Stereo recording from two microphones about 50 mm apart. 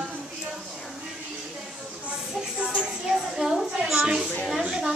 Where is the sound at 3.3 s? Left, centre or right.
Centre.